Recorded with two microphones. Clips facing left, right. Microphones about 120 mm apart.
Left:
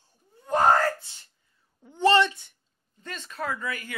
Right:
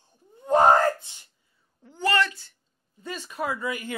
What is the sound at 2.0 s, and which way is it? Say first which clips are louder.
Speech: left 4 dB; 25° left (ahead or behind).